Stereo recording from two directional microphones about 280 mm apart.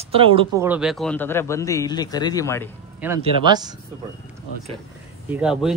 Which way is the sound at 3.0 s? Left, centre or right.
Centre.